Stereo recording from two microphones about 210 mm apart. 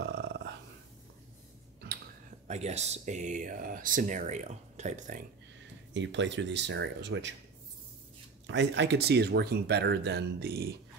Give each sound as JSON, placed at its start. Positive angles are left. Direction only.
{"t": 0.0, "sound": "burping", "side_deg": -55}
{"t": 2.4, "sound": "speech", "side_deg": -30}
{"t": 5.9, "sound": "speech", "side_deg": -60}
{"t": 8.5, "sound": "speech", "side_deg": -55}